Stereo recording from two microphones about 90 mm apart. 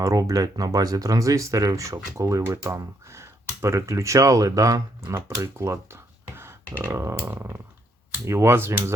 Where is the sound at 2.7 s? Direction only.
35° right (ahead or behind).